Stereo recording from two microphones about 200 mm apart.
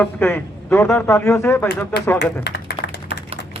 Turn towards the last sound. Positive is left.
turn(degrees=55)  # may be behind; listen again after turning